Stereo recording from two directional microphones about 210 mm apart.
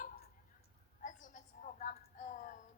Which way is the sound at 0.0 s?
40° left (ahead or behind).